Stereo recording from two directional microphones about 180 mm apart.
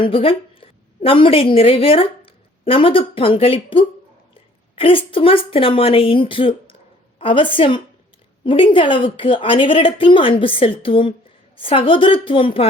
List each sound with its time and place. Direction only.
0.0 s a woman's voice: 30° left (ahead or behind)